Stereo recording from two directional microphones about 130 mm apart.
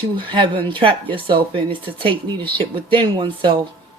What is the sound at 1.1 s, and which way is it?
Speech, 40° right (ahead or behind).